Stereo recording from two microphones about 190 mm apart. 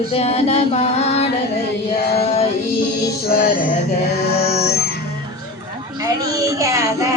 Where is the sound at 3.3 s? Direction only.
50° left (ahead or behind).